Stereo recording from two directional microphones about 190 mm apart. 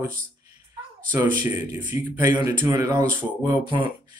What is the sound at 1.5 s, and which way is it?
Speech, 10° right (ahead or behind).